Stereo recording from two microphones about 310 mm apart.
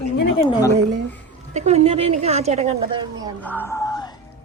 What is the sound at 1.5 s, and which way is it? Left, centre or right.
A woman's voice, right.